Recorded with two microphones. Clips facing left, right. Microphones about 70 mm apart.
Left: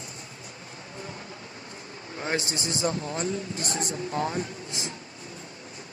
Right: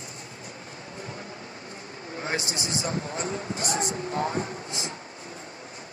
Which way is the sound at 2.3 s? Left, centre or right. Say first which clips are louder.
Left 1 dB; left.